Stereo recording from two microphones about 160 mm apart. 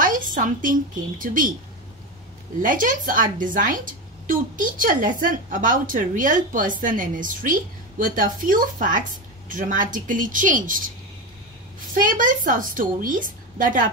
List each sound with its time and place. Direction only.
0.0 s a woman's voice: 55° right (ahead or behind)
2.6 s a woman's voice: 55° right (ahead or behind)
11.9 s a woman's voice: 60° right (ahead or behind)